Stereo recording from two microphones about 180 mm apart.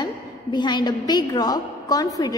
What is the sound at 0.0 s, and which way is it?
A woman's voice, 25° left (ahead or behind).